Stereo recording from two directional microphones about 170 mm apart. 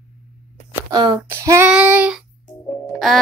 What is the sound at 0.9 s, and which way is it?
Speech, 25° right (ahead or behind).